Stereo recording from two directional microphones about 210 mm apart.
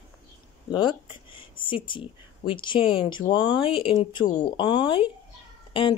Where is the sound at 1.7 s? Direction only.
25° left (ahead or behind).